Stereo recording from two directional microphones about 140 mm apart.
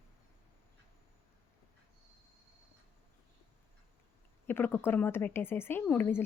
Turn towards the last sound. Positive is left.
turn(degrees=15)  # may be behind; listen again after turning